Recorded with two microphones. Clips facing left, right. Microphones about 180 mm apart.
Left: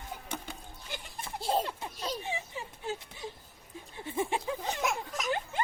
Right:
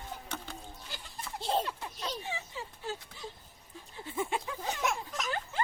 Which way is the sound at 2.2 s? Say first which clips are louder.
Left 2 dB; 20° left (ahead or behind).